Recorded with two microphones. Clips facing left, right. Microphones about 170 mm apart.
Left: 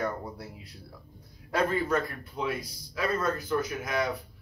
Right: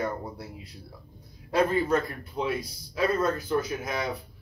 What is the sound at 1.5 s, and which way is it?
Speech, 25° right (ahead or behind).